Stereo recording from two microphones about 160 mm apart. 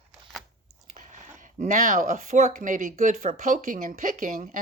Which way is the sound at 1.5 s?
50° right (ahead or behind).